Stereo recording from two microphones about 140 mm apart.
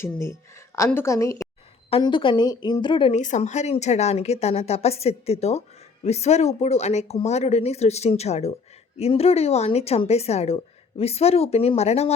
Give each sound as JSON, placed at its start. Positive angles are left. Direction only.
{"t": 0.0, "sound": "a woman's voice", "side_deg": 20}
{"t": 1.9, "sound": "speech", "side_deg": 35}
{"t": 3.1, "sound": "speech", "side_deg": 60}